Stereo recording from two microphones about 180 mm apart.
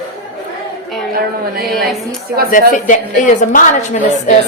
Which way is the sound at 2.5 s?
45° left (ahead or behind).